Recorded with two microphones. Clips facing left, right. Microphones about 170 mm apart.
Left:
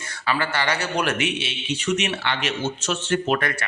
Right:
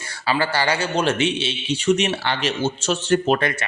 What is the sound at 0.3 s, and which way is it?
Speech, 35° right (ahead or behind).